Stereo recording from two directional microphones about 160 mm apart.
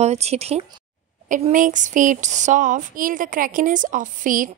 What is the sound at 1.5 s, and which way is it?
Speech, 55° right (ahead or behind).